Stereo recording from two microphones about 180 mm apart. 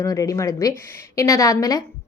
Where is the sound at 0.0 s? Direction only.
20° left (ahead or behind).